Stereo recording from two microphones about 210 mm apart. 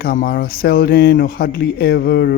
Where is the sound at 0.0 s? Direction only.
45° left (ahead or behind).